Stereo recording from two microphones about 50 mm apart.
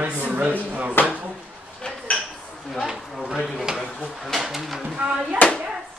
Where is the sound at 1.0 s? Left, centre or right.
Left.